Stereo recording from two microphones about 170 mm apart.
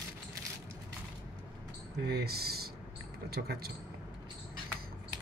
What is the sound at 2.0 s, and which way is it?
Speech, 70° right (ahead or behind).